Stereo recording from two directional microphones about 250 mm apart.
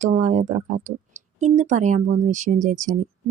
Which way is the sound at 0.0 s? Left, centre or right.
Right.